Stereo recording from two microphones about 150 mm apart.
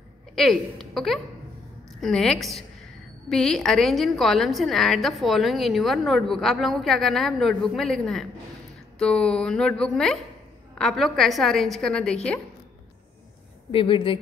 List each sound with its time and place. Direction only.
0.4 s a woman's voice: centre (ahead or behind)
13.7 s speech: 35° left (ahead or behind)